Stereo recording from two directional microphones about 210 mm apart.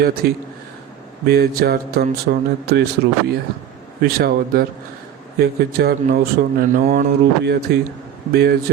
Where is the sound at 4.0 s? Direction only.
45° right (ahead or behind).